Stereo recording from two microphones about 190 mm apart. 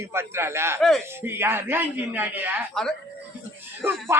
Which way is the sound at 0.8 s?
Centre (ahead or behind).